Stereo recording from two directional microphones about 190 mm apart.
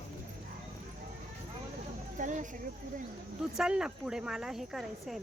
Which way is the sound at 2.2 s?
40° right (ahead or behind).